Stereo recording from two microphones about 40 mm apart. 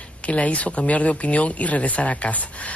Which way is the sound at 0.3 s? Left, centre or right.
Left.